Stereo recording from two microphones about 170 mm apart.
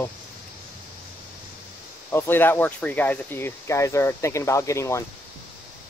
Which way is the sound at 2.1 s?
15° left (ahead or behind).